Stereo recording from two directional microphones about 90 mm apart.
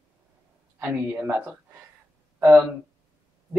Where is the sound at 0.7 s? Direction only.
25° right (ahead or behind).